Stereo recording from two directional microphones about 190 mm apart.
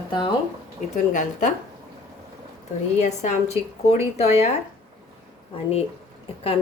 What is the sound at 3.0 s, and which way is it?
Speech, 35° left (ahead or behind).